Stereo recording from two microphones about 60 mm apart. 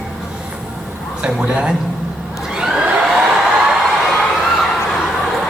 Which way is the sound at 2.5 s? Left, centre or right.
Centre.